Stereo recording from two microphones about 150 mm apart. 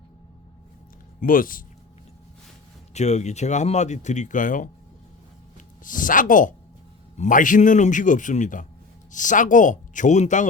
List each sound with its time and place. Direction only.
1.2 s speech: 70° left (ahead or behind)
2.9 s a man's voice: 50° left (ahead or behind)